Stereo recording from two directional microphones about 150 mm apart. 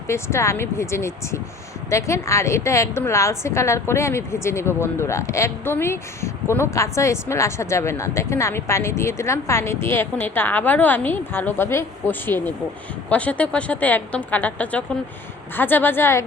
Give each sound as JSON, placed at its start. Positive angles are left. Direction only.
{"t": 0.1, "sound": "a woman's voice", "side_deg": 20}